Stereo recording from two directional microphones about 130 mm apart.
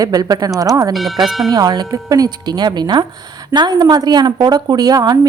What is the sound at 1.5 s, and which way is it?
Speech, 30° right (ahead or behind).